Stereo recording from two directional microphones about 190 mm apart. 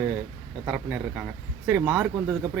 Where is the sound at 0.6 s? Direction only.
10° right (ahead or behind).